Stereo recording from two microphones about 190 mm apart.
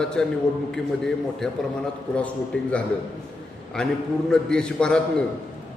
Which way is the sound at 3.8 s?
5° left (ahead or behind).